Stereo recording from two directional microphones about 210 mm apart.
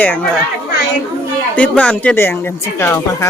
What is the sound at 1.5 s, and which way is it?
Speech, 5° left (ahead or behind).